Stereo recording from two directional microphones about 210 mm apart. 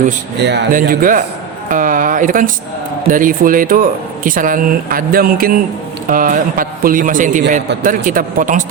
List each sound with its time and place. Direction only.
0.3 s speech: 55° right (ahead or behind)
0.7 s speech: 40° right (ahead or behind)